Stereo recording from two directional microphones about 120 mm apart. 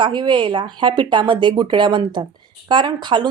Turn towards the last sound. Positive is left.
turn(degrees=-40)  # may be behind; listen again after turning